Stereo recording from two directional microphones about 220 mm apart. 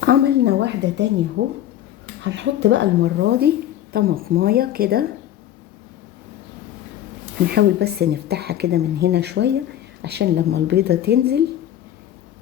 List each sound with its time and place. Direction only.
0.0 s speech: 50° right (ahead or behind)
7.4 s speech: 50° right (ahead or behind)